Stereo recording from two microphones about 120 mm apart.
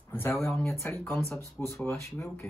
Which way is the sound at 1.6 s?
15° left (ahead or behind).